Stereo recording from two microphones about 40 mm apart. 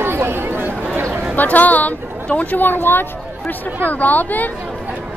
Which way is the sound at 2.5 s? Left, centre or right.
Left.